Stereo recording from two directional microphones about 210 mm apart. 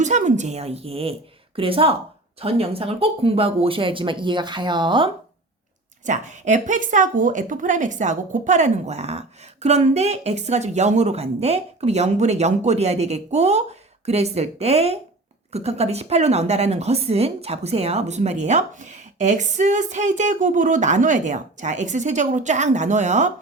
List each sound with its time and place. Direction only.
0.0 s a woman's voice: 35° right (ahead or behind)
6.1 s a woman's voice: 35° right (ahead or behind)